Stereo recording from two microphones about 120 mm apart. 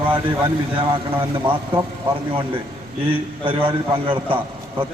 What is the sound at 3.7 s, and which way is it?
Speech, 45° right (ahead or behind).